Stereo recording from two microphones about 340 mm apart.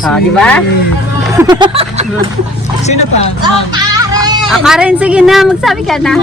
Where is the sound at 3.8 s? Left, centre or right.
Centre.